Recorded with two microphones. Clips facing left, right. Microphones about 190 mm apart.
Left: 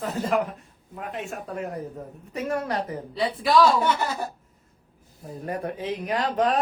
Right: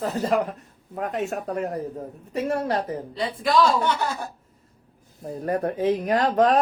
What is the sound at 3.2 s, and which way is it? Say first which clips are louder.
Speech: left 1 dB; 5° left (ahead or behind).